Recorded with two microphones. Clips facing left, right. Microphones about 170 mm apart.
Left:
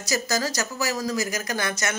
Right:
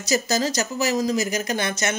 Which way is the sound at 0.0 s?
25° right (ahead or behind).